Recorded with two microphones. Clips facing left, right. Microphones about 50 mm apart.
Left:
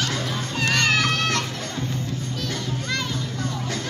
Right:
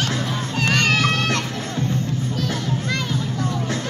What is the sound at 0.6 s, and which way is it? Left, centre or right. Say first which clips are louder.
Children playing: right 2 dB; centre.